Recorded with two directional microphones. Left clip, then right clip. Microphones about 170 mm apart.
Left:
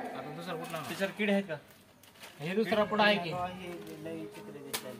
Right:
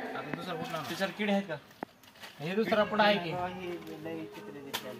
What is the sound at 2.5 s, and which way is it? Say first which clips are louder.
Speech: right 1 dB; 10° left (ahead or behind).